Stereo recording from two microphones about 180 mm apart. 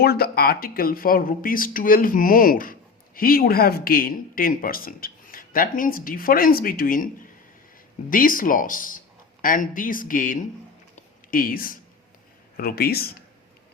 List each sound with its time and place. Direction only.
0.0 s speech: 60° left (ahead or behind)
10.9 s a sound: 50° left (ahead or behind)
12.5 s speech: 55° left (ahead or behind)